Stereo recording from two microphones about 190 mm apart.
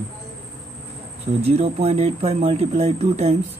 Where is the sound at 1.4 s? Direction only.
30° right (ahead or behind).